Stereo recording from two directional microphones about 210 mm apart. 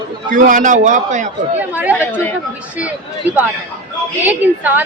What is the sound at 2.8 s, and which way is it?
A woman's voice, 5° right (ahead or behind).